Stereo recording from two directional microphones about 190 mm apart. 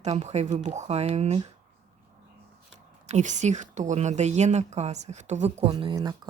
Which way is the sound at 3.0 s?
40° right (ahead or behind).